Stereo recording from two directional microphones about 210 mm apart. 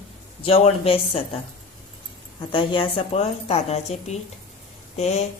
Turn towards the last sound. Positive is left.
turn(degrees=30)  # may be behind; listen again after turning